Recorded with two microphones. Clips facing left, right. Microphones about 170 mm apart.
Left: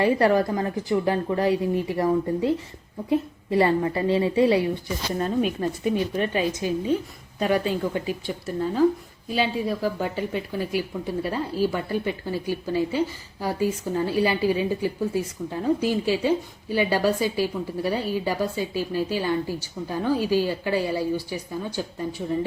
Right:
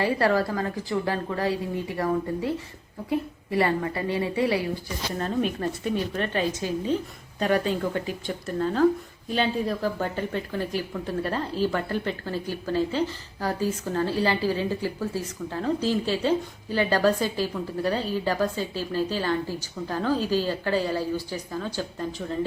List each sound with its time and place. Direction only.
0.0 s a woman's voice: 20° left (ahead or behind)
6.1 s speech: 15° left (ahead or behind)